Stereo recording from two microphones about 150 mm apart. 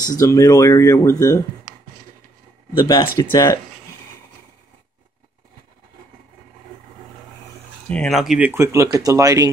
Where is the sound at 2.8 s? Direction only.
30° left (ahead or behind).